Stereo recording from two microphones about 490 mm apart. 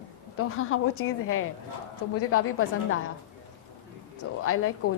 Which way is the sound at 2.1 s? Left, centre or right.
Left.